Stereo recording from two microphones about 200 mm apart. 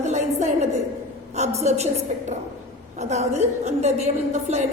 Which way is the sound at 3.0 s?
35° right (ahead or behind).